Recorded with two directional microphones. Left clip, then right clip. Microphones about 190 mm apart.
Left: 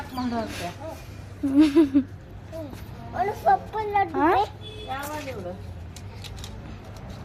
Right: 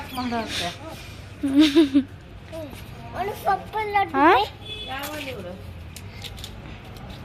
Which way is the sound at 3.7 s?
10° left (ahead or behind).